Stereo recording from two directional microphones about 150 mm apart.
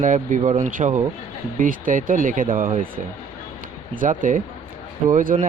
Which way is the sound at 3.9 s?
65° right (ahead or behind).